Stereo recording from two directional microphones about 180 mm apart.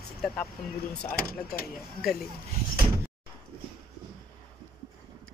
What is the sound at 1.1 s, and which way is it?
Speech, 55° left (ahead or behind).